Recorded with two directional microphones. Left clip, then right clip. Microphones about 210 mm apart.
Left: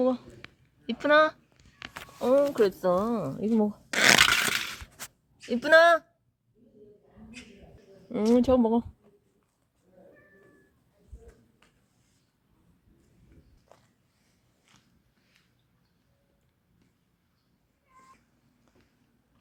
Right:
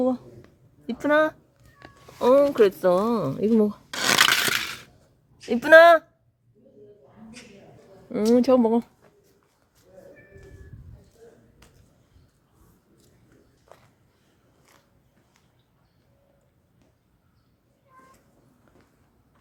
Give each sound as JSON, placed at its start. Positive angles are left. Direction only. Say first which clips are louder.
{"t": 0.0, "sound": "a sound", "louder": "right 2 dB", "side_deg": -10}
{"t": 2.1, "sound": "speech", "louder": "right 6 dB", "side_deg": -10}
{"t": 4.3, "sound": "crushing", "louder": "right 3 dB", "side_deg": 5}
{"t": 5.5, "sound": "speech", "louder": "right 6 dB", "side_deg": -15}
{"t": 8.1, "sound": "speech", "louder": "right 4 dB", "side_deg": 0}
{"t": 13.7, "sound": "a sound", "louder": "right 7 dB", "side_deg": 5}